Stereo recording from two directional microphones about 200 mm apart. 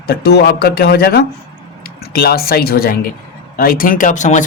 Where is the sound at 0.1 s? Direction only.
55° left (ahead or behind).